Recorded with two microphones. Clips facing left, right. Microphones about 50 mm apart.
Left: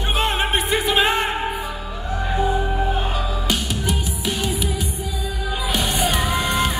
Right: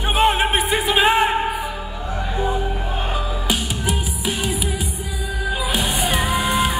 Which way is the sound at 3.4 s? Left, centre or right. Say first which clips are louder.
Right 1 dB; centre.